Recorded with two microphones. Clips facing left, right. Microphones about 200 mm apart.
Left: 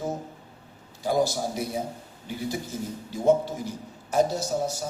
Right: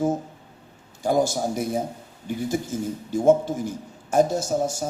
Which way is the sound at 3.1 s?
50° right (ahead or behind).